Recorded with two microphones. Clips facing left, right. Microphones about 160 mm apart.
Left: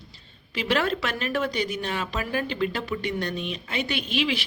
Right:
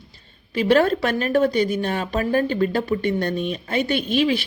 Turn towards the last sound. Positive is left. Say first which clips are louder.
# right 7 dB
turn(degrees=-45)  # may be behind; listen again after turning